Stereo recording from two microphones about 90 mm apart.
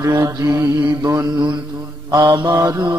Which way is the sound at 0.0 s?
40° right (ahead or behind).